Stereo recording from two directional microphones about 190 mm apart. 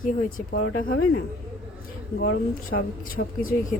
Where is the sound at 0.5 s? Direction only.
60° left (ahead or behind).